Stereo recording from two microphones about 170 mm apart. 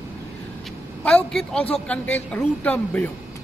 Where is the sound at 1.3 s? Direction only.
5° left (ahead or behind).